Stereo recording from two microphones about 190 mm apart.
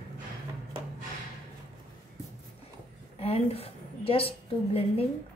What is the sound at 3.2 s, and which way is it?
A woman's voice, 30° left (ahead or behind).